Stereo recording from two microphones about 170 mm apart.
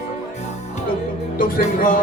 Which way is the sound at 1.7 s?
55° left (ahead or behind).